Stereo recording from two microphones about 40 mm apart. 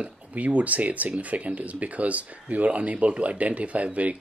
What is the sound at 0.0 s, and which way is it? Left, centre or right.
Speech, right.